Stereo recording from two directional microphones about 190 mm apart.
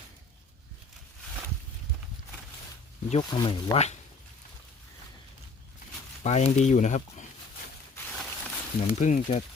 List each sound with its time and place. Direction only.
3.1 s speech: 25° left (ahead or behind)
6.2 s speech: 35° left (ahead or behind)
8.2 s a sound: 5° left (ahead or behind)
9.0 s speech: 40° left (ahead or behind)